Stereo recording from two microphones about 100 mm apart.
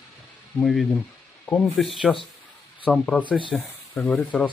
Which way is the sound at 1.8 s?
Centre (ahead or behind).